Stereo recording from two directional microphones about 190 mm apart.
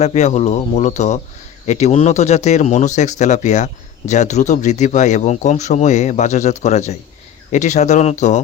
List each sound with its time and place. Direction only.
0.0 s speech: 35° left (ahead or behind)